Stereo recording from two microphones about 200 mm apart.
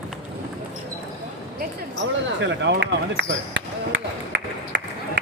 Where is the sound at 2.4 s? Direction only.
65° right (ahead or behind).